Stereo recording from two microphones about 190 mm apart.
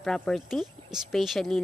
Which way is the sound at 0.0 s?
5° left (ahead or behind).